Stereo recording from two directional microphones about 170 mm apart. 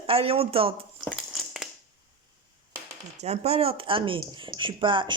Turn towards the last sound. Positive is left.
turn(degrees=-30)  # may be behind; listen again after turning